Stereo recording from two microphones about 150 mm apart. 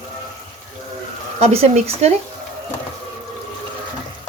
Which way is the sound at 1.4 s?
45° right (ahead or behind).